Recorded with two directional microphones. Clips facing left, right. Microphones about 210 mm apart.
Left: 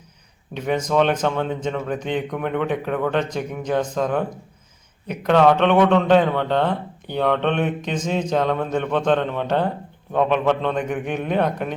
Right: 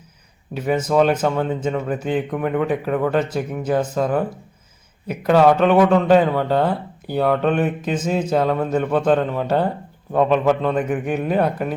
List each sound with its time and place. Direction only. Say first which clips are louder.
0.5 s a man's voice: right 2 dB; 5° right (ahead or behind)